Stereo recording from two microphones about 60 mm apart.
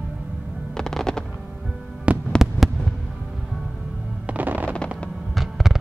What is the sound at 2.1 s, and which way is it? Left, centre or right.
Heart sounds, right.